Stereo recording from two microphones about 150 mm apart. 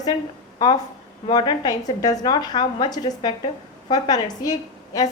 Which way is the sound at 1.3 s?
30° left (ahead or behind).